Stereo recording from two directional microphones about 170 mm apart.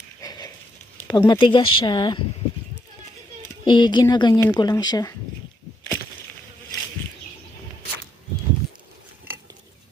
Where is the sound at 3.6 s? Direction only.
25° left (ahead or behind).